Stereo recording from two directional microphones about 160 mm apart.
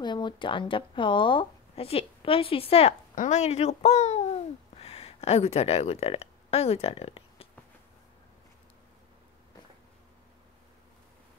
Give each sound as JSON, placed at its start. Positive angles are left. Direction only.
{"t": 0.0, "sound": "speech", "side_deg": 30}